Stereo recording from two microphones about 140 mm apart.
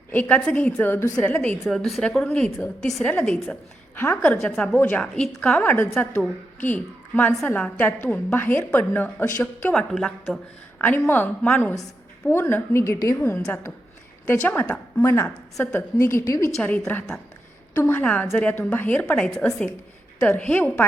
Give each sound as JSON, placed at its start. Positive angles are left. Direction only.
{"t": 0.1, "sound": "a woman's voice", "side_deg": 10}
{"t": 1.2, "sound": "a woman's voice", "side_deg": 10}
{"t": 5.6, "sound": "a woman's voice", "side_deg": 15}
{"t": 9.9, "sound": "speech", "side_deg": 0}
{"t": 10.8, "sound": "a woman's voice", "side_deg": 10}